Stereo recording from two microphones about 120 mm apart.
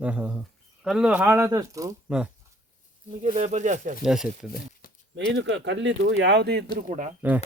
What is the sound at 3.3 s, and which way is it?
Speech, 90° right.